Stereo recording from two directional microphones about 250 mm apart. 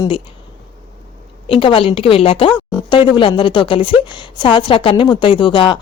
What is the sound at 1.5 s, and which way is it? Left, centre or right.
A woman's voice, left.